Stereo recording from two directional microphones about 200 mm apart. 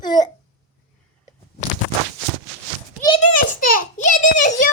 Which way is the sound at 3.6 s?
45° left (ahead or behind).